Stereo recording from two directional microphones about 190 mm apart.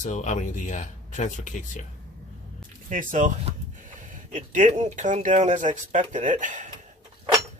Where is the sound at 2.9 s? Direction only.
40° right (ahead or behind).